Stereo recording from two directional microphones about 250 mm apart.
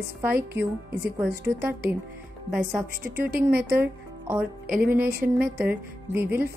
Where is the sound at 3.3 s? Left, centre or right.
Right.